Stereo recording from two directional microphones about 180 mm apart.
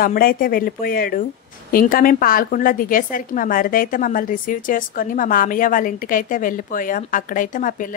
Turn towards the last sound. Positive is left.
turn(degrees=45)  # may be behind; listen again after turning